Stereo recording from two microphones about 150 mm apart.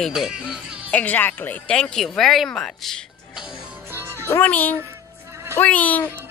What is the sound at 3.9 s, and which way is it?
Music, 15° right (ahead or behind).